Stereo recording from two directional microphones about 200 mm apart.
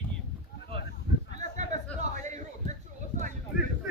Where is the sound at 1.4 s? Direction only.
35° right (ahead or behind).